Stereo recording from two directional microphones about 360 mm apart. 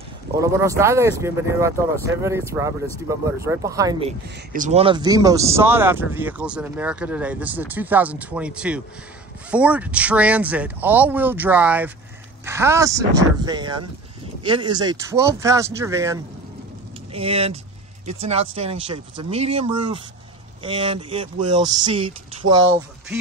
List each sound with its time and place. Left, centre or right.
0.4 s speech: centre